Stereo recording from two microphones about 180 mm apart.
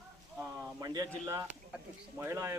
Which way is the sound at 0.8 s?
20° right (ahead or behind).